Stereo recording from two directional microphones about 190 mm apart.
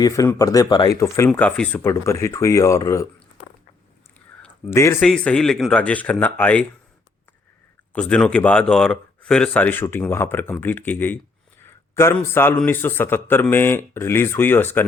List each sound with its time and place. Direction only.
0.0 s speech: 15° left (ahead or behind)
4.4 s speech: 15° left (ahead or behind)
7.9 s speech: 5° left (ahead or behind)